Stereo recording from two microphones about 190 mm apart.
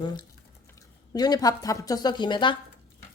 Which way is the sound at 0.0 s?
20° left (ahead or behind).